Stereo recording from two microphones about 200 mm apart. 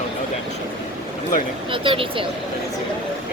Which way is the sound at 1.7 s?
25° right (ahead or behind).